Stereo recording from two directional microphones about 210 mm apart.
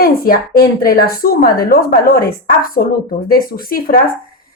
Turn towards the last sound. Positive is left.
turn(degrees=45)  # may be behind; listen again after turning